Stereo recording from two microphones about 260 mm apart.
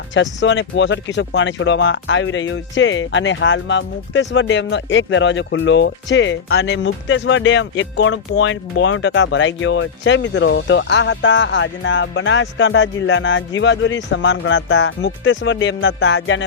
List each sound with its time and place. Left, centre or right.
0.1 s speech: left